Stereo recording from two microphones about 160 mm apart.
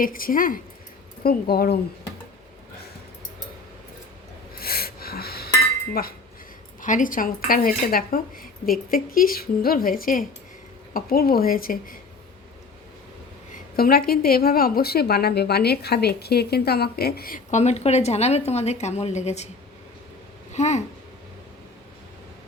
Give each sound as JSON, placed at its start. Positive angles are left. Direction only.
{"t": 0.0, "sound": "speech", "side_deg": 60}
{"t": 1.2, "sound": "a woman's voice", "side_deg": 75}
{"t": 4.5, "sound": "wheeze", "side_deg": 70}
{"t": 5.9, "sound": "a woman's voice", "side_deg": 70}
{"t": 6.8, "sound": "speech", "side_deg": 55}
{"t": 13.7, "sound": "a woman's voice", "side_deg": 70}
{"t": 20.5, "sound": "speech", "side_deg": 45}